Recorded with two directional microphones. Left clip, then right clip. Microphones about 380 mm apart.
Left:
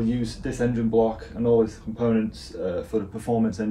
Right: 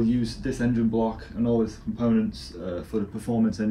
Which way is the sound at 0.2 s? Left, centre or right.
Centre.